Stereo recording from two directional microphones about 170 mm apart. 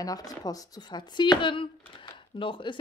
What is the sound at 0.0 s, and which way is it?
Speech, 20° left (ahead or behind).